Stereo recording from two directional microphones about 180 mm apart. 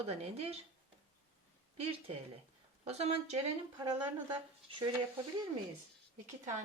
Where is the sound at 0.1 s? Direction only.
35° right (ahead or behind).